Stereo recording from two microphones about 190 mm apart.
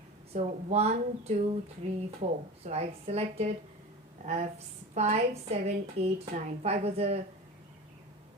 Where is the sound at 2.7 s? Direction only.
35° right (ahead or behind).